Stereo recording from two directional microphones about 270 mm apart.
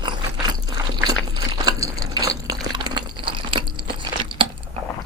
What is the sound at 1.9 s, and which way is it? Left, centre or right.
Water, centre.